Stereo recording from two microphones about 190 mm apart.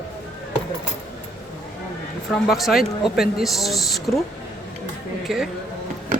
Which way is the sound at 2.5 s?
Centre (ahead or behind).